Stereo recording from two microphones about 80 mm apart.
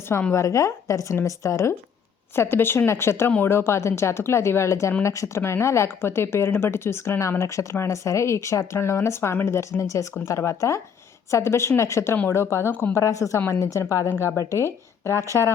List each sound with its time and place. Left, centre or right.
0.3 s a woman's voice: left